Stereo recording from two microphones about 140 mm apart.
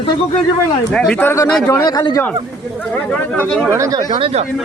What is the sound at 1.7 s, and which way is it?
Speech, 30° left (ahead or behind).